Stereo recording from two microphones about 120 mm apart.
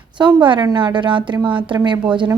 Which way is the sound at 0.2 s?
40° right (ahead or behind).